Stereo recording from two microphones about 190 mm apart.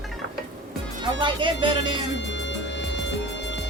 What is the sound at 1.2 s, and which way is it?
Music, 25° right (ahead or behind).